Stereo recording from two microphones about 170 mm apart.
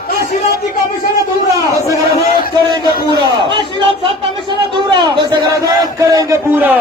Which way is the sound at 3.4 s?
30° right (ahead or behind).